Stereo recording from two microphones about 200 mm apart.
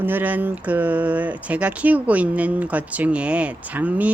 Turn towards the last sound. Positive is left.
turn(degrees=-10)  # may be behind; listen again after turning